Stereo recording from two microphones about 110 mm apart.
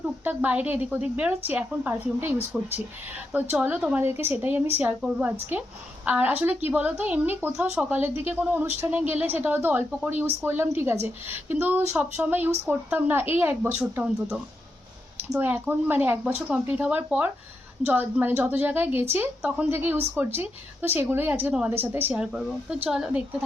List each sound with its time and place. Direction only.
0.3 s a woman's voice: 15° right (ahead or behind)
15.4 s a woman's voice: 15° right (ahead or behind)
22.2 s a woman's voice: 5° right (ahead or behind)